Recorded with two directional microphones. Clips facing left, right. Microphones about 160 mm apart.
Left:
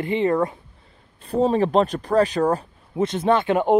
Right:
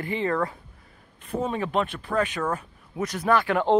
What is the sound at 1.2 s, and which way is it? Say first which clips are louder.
Speech: left 8 dB; 35° left (ahead or behind).